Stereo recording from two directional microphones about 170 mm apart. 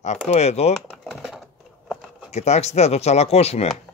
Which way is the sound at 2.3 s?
40° left (ahead or behind).